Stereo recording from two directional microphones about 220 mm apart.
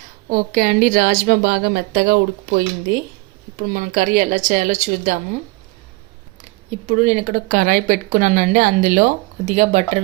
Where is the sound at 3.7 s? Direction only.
40° right (ahead or behind).